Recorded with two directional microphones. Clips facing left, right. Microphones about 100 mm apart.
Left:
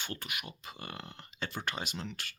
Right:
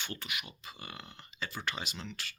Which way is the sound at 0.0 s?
45° left (ahead or behind).